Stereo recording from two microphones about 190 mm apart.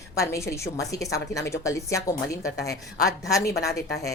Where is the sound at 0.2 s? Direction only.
15° left (ahead or behind).